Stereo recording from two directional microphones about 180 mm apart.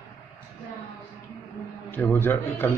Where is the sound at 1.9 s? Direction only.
10° left (ahead or behind).